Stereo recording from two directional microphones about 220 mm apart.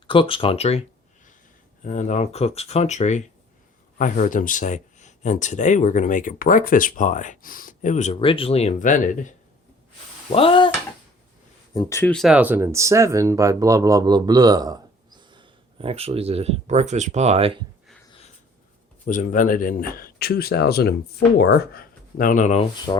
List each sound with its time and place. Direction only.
0.1 s speech: 25° left (ahead or behind)
1.8 s speech: 35° left (ahead or behind)
10.2 s speech: 25° left (ahead or behind)
11.7 s speech: 15° left (ahead or behind); by 17.6 s 25° right (ahead or behind)
19.0 s speech: 35° left (ahead or behind)
22.9 s speech: 20° left (ahead or behind)